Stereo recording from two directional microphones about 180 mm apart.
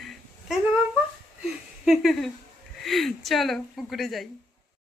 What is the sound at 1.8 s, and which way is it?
Speech, centre (ahead or behind).